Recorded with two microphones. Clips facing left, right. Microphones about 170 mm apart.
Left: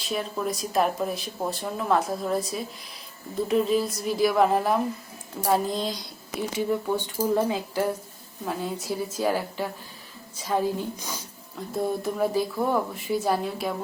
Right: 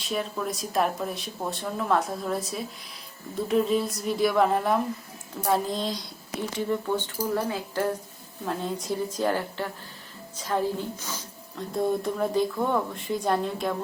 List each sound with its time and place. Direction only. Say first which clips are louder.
0.0 s a woman's voice: left 1 dB; centre (ahead or behind)
7.2 s a woman's voice: left 4 dB; 20° left (ahead or behind); by 13.7 s 5° left (ahead or behind)